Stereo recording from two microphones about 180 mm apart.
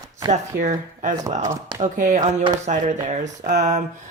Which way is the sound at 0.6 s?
45° right (ahead or behind).